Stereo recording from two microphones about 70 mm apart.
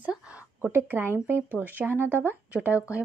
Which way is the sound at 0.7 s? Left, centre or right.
Right.